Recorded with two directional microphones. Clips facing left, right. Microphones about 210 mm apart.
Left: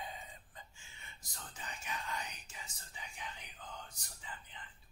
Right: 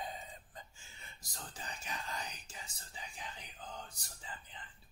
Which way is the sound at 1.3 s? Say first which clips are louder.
Right 2 dB; 35° right (ahead or behind).